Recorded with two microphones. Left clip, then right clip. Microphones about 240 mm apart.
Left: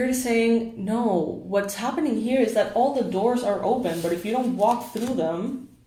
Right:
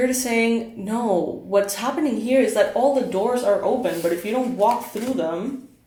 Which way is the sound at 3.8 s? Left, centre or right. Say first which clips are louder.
Right 3 dB; right.